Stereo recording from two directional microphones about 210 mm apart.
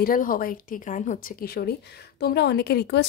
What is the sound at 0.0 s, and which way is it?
A woman's voice, 40° left (ahead or behind).